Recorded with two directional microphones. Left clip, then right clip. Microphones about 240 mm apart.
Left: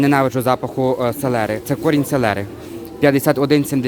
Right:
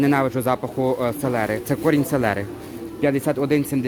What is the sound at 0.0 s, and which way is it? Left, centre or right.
A man's voice, centre.